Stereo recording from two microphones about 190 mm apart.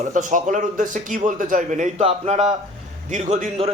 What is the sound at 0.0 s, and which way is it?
A man's voice, 40° right (ahead or behind).